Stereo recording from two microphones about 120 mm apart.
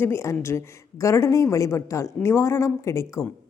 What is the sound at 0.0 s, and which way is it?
A woman's voice, 20° left (ahead or behind).